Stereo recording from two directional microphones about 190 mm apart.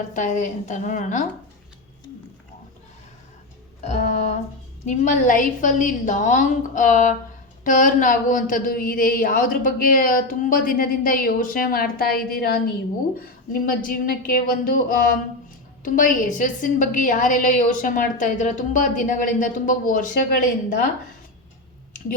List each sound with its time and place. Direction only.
0.1 s a woman's voice: 40° left (ahead or behind)
3.8 s female singing: 35° left (ahead or behind)
4.9 s a woman's voice: 40° left (ahead or behind)